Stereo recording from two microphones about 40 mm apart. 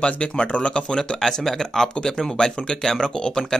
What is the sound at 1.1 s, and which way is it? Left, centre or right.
Speech, centre.